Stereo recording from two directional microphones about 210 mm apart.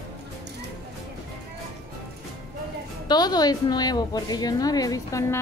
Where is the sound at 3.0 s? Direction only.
20° left (ahead or behind).